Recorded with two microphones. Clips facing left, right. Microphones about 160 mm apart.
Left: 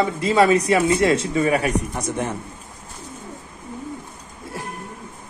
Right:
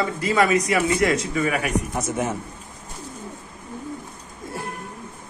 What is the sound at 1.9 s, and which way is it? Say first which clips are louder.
Speech: even; 5° right (ahead or behind).